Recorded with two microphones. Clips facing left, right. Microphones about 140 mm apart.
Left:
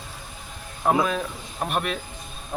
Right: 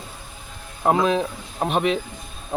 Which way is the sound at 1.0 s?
20° right (ahead or behind).